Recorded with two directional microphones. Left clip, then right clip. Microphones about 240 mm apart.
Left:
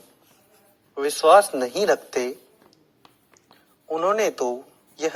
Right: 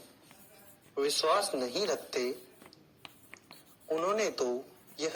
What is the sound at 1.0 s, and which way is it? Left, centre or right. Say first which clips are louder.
Speech: left 13 dB; centre.